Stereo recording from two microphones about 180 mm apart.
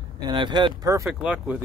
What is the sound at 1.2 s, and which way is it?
Speech, 5° right (ahead or behind).